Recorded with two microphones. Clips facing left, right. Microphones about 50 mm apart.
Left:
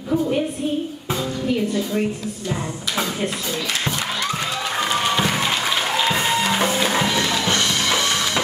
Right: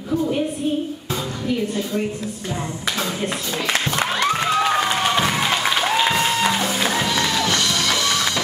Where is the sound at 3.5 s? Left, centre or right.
Right.